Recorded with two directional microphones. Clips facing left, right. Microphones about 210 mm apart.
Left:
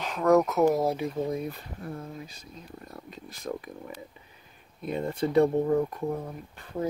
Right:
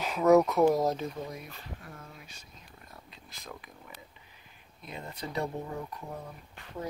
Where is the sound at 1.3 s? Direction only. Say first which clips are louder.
Left 11 dB; 30° left (ahead or behind); by 6.0 s 50° left (ahead or behind).